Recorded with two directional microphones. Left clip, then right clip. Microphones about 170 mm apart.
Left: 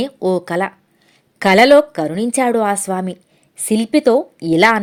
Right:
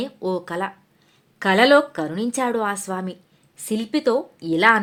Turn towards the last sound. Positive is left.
turn(degrees=35)  # may be behind; listen again after turning